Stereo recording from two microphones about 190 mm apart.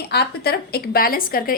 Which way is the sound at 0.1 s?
55° left (ahead or behind).